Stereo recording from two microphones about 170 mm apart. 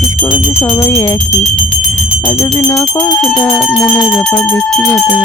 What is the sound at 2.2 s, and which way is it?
Speech, 20° left (ahead or behind).